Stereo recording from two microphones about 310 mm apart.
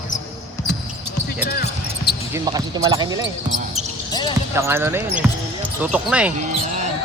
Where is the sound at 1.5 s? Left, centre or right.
Left.